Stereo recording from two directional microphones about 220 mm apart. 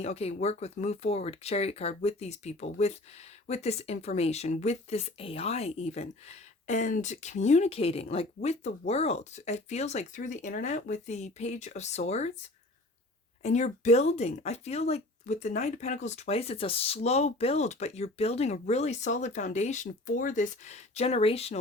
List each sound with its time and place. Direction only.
0.0 s speech: 30° left (ahead or behind)
13.4 s speech: 30° left (ahead or behind)